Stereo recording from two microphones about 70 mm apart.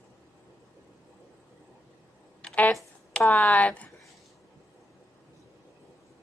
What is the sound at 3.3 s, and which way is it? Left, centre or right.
Speech, left.